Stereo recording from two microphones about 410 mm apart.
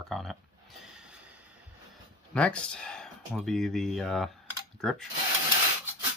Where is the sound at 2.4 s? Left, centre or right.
Centre.